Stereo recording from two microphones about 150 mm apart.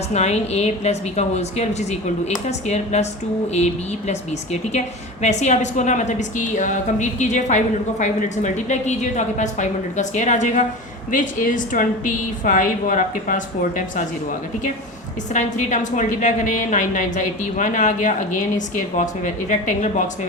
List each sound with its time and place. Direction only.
0.1 s a woman's voice: 45° left (ahead or behind)
5.2 s a woman's voice: 50° left (ahead or behind)
15.3 s a woman's voice: 55° left (ahead or behind)